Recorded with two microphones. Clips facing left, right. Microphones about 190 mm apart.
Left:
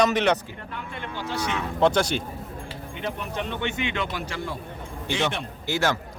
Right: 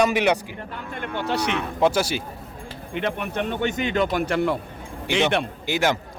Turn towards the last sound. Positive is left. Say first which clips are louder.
# right 2 dB
turn(degrees=-15)  # may be behind; listen again after turning